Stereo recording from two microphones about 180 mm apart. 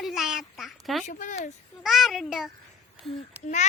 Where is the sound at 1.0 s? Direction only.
45° left (ahead or behind).